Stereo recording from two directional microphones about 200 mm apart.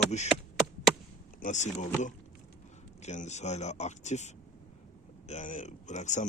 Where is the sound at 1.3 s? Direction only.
40° left (ahead or behind).